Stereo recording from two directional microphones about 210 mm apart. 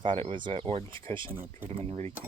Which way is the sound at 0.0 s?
25° right (ahead or behind).